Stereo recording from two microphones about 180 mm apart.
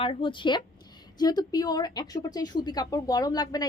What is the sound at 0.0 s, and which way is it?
Speech, 30° left (ahead or behind).